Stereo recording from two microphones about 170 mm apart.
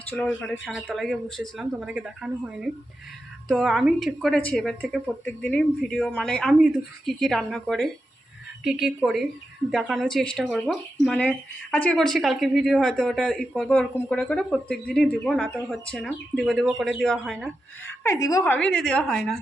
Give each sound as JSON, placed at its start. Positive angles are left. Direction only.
{"t": 0.3, "sound": "speech", "side_deg": 5}
{"t": 17.8, "sound": "a woman's voice", "side_deg": 15}
{"t": 18.4, "sound": "speech", "side_deg": 10}